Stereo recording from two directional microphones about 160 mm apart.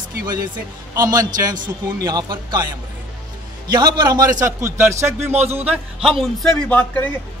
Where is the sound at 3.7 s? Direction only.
30° right (ahead or behind).